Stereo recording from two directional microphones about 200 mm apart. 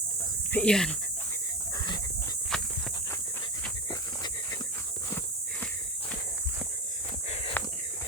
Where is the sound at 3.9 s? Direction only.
15° left (ahead or behind).